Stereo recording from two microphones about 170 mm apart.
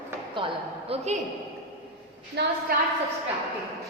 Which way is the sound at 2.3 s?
80° right.